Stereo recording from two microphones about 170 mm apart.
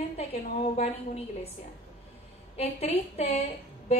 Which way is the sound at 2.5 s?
35° left (ahead or behind).